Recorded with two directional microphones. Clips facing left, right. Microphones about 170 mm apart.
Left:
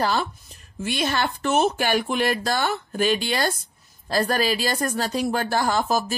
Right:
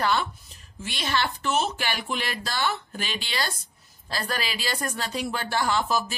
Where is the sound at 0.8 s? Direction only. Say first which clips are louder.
Left 4 dB; 50° left (ahead or behind).